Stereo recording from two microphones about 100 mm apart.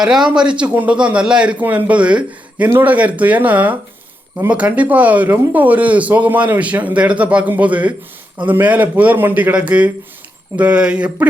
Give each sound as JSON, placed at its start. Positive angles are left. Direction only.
{"t": 0.0, "sound": "speech", "side_deg": -5}